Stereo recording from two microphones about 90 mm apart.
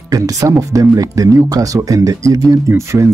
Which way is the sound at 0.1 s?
40° right (ahead or behind).